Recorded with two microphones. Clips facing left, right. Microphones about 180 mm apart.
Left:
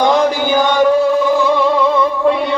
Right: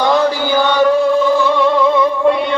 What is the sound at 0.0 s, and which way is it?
Music, 15° left (ahead or behind).